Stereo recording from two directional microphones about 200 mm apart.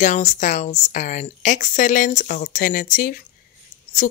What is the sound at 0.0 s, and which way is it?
Speech, 40° left (ahead or behind).